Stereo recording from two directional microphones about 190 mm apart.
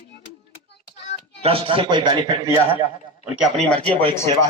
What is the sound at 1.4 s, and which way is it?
A man's voice, 30° right (ahead or behind).